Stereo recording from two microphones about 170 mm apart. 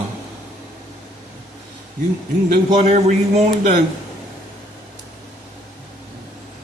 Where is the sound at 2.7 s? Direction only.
40° right (ahead or behind).